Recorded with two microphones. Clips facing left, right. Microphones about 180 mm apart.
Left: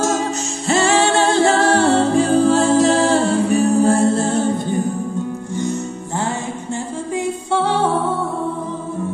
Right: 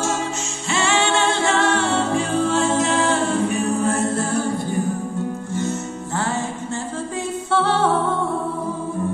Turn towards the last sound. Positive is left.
turn(degrees=15)  # may be behind; listen again after turning